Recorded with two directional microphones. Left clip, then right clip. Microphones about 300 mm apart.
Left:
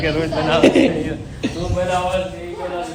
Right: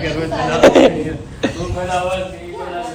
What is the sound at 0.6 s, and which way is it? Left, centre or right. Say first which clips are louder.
Speech: right 6 dB; centre.